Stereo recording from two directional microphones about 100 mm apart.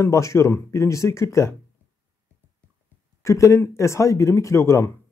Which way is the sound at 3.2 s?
30° left (ahead or behind).